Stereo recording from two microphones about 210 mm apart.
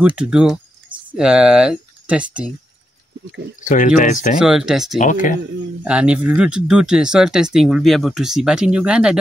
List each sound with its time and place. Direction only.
0.0 s speech: 5° right (ahead or behind)
3.6 s speech: 35° left (ahead or behind)
4.4 s speech: centre (ahead or behind)
4.9 s speech: 40° left (ahead or behind)
5.9 s speech: 5° right (ahead or behind)